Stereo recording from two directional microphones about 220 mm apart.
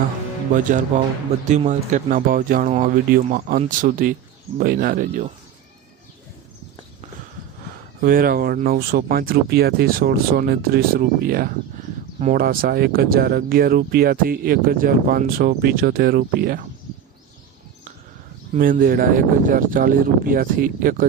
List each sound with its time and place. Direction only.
1.5 s speech: 30° right (ahead or behind)
8.0 s speech: 40° right (ahead or behind)
18.5 s speech: 40° right (ahead or behind)